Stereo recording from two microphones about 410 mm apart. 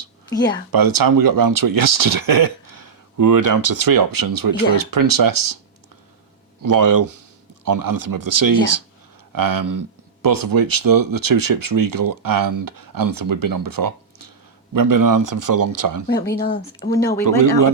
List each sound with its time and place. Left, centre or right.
0.7 s speech: right
6.6 s speech: right
16.3 s speech: left
16.8 s speech: centre
17.2 s speech: right